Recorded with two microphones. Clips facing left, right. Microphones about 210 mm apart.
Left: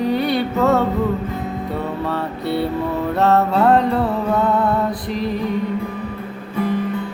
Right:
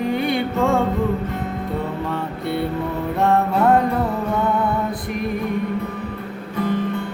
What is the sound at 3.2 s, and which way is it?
Music, 80° left.